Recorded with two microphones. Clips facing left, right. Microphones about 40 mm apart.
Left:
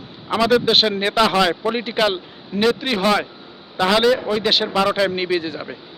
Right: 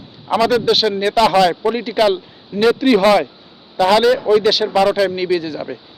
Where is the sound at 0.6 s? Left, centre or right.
Left; by 1.7 s centre.